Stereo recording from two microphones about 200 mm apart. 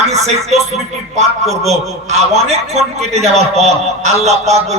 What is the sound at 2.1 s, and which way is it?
Speech, 30° right (ahead or behind).